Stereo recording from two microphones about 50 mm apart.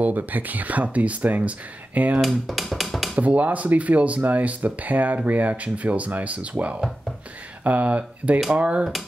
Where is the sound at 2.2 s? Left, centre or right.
Centre.